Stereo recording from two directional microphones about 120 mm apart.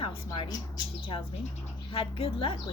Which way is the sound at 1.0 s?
50° left (ahead or behind).